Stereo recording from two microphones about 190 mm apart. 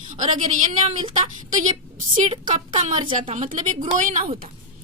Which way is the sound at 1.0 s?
25° right (ahead or behind).